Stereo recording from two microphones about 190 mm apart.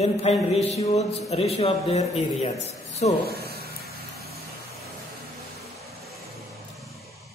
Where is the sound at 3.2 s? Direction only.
55° right (ahead or behind).